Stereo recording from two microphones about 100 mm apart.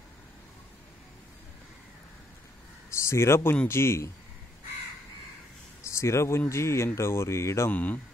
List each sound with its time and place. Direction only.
2.9 s a man's voice: 25° left (ahead or behind)
5.9 s speech: 30° left (ahead or behind)
7.7 s speech: 15° left (ahead or behind)